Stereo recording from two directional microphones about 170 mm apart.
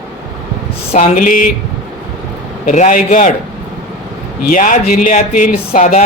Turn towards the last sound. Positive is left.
turn(degrees=50)  # may be behind; listen again after turning